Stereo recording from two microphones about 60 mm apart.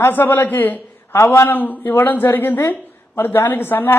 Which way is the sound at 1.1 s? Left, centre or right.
Left.